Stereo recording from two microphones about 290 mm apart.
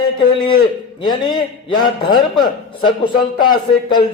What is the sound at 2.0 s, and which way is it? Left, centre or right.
A man's voice, centre.